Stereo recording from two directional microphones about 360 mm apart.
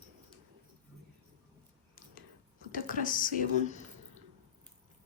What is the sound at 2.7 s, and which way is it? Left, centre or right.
Speech, left.